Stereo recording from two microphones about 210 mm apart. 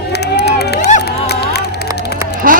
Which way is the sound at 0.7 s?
35° left (ahead or behind).